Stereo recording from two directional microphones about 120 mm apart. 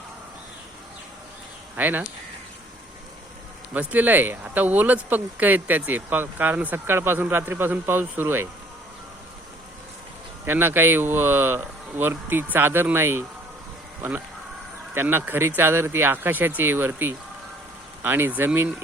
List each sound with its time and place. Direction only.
1.7 s speech: 15° right (ahead or behind)
3.7 s speech: 10° right (ahead or behind)
10.4 s speech: 15° right (ahead or behind)
14.9 s speech: 15° right (ahead or behind)